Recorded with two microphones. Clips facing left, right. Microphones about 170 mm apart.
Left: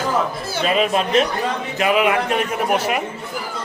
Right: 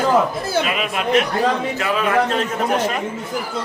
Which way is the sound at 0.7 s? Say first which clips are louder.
Left 5 dB; 35° left (ahead or behind).